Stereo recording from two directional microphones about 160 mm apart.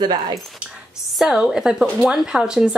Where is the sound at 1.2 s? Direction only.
Centre (ahead or behind).